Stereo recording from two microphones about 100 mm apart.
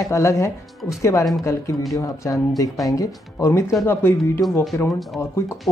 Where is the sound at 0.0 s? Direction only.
30° left (ahead or behind).